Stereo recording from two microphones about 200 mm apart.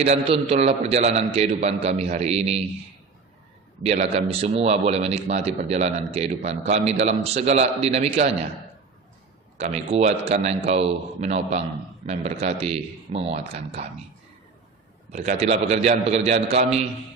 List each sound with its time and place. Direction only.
0.0 s a man's voice: 30° right (ahead or behind)
3.8 s a man's voice: 35° right (ahead or behind)
9.6 s a man's voice: 35° right (ahead or behind)
15.1 s a man's voice: 35° right (ahead or behind)